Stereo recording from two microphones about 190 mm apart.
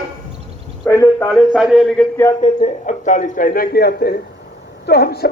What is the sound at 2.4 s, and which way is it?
A man's voice, 40° left (ahead or behind).